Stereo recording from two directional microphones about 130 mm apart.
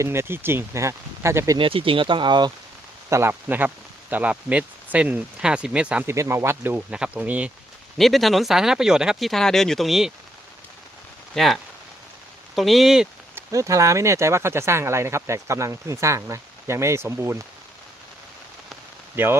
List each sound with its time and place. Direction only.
0.0 s speech: 20° right (ahead or behind)
1.5 s speech: 45° right (ahead or behind)
3.1 s speech: 20° right (ahead or behind)
6.1 s speech: 20° right (ahead or behind)
7.9 s speech: centre (ahead or behind)
11.3 s speech: centre (ahead or behind)
13.3 s speech: 25° right (ahead or behind)
19.1 s speech: 15° right (ahead or behind)